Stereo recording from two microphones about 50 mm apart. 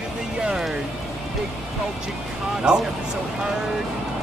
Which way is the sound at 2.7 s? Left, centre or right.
Centre.